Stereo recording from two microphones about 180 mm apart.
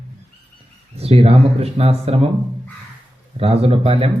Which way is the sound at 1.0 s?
35° right (ahead or behind).